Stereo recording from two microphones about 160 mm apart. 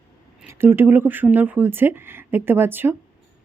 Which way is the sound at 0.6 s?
15° right (ahead or behind).